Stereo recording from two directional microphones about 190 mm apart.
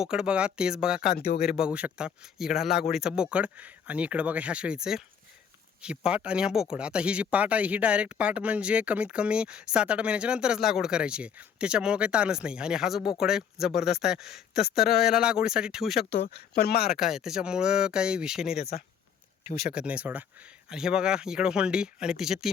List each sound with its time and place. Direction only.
0.0 s speech: 5° right (ahead or behind)
1.1 s speech: 55° left (ahead or behind)
1.5 s speech: 5° right (ahead or behind)
14.6 s speech: 55° left (ahead or behind)
15.0 s speech: 5° right (ahead or behind)
16.0 s speech: 60° left (ahead or behind)
17.0 s speech: centre (ahead or behind)
19.7 s speech: 5° right (ahead or behind)